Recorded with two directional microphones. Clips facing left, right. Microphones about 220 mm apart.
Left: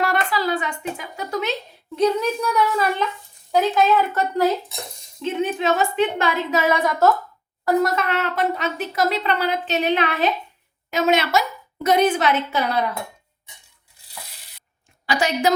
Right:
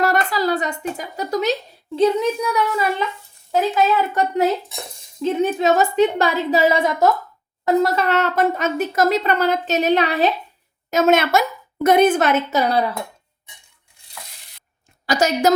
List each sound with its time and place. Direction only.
0.0 s a woman's voice: 40° right (ahead or behind)
2.0 s a child's voice: 20° right (ahead or behind)
5.2 s a woman's voice: 40° right (ahead or behind); by 7.9 s 20° right (ahead or behind)
7.9 s a woman's voice: 40° right (ahead or behind)
10.9 s a woman's voice: 50° right (ahead or behind)
15.0 s a woman's voice: 40° right (ahead or behind)